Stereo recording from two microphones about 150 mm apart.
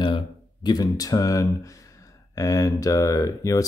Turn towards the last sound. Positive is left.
turn(degrees=20)  # may be behind; listen again after turning